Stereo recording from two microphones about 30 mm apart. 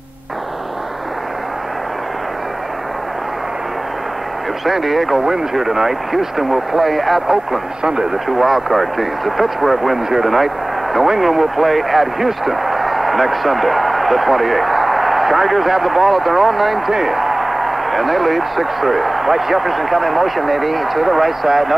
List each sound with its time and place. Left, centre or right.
4.6 s a man's voice: centre
7.8 s speech: right
8.3 s a man's voice: centre